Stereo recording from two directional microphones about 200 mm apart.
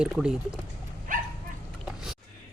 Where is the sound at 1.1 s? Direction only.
40° right (ahead or behind).